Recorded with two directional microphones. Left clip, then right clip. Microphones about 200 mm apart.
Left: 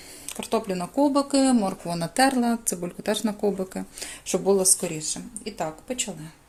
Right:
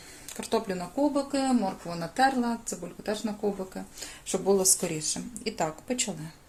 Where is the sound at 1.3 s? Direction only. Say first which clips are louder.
Left 5 dB; 40° left (ahead or behind).